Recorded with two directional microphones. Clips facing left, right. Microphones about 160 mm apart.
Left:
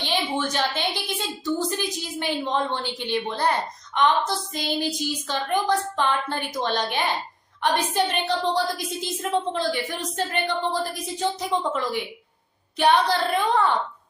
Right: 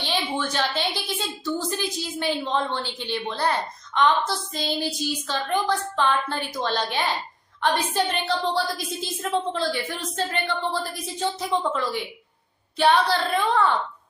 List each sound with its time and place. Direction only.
0.0 s a woman's voice: 15° left (ahead or behind)